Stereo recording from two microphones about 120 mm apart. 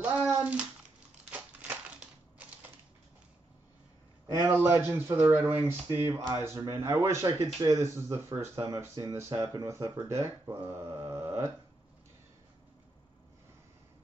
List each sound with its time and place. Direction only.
0.0 s a sound: 10° right (ahead or behind)
1.3 s crushing: 10° right (ahead or behind)
4.3 s speech: 20° right (ahead or behind)